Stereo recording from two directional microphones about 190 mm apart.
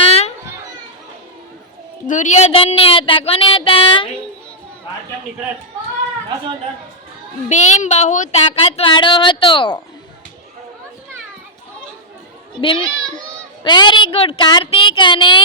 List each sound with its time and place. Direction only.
0.0 s children playing: 30° left (ahead or behind)
2.0 s speech: 40° left (ahead or behind)
7.5 s speech: 40° left (ahead or behind)
13.7 s speech: 25° left (ahead or behind)